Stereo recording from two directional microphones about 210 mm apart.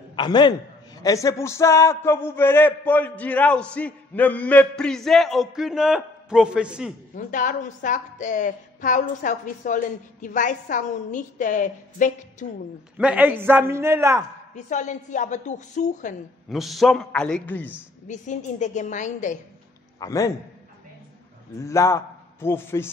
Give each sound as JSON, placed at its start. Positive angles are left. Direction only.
{"t": 0.1, "sound": "a man's voice", "side_deg": 20}
{"t": 7.2, "sound": "a woman's voice", "side_deg": 40}
{"t": 12.9, "sound": "a man's voice", "side_deg": -5}
{"t": 14.5, "sound": "a woman's voice", "side_deg": 35}
{"t": 16.4, "sound": "a man's voice", "side_deg": 0}
{"t": 18.0, "sound": "a woman's voice", "side_deg": 35}
{"t": 20.0, "sound": "a man's voice", "side_deg": 15}
{"t": 21.6, "sound": "a man's voice", "side_deg": 15}